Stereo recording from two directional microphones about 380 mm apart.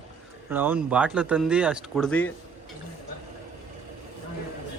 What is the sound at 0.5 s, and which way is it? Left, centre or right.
Speech, centre.